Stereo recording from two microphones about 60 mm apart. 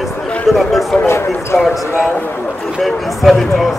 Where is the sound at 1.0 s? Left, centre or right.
Left.